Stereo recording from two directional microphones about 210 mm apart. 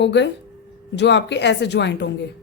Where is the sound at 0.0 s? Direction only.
55° left (ahead or behind).